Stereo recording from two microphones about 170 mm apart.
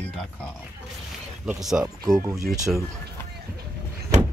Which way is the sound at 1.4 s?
5° right (ahead or behind).